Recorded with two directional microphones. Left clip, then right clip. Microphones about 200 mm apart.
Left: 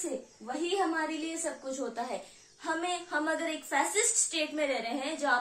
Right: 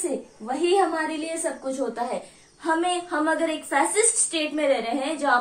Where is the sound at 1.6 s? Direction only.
15° left (ahead or behind).